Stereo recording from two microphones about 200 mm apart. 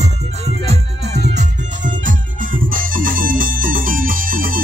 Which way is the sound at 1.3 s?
40° right (ahead or behind).